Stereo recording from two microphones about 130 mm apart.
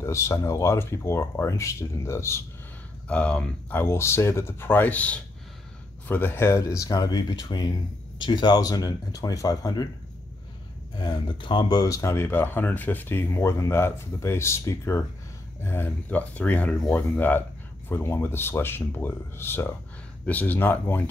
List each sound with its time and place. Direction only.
0.0 s speech: 20° left (ahead or behind)
3.1 s speech: 10° left (ahead or behind); by 9.8 s 30° left (ahead or behind)
11.0 s speech: 35° left (ahead or behind); by 21.0 s 15° left (ahead or behind)